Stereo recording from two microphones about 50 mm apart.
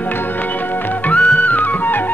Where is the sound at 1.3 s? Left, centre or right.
Left.